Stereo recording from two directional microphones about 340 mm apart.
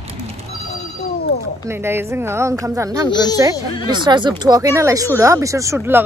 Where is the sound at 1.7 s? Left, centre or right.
Centre.